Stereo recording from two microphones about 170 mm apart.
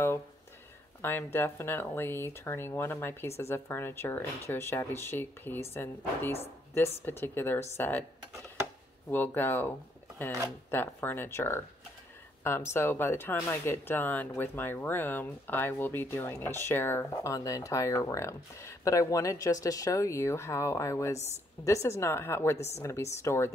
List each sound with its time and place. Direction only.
1.0 s speech: 15° left (ahead or behind)
9.1 s speech: 10° left (ahead or behind)
12.7 s speech: 15° left (ahead or behind)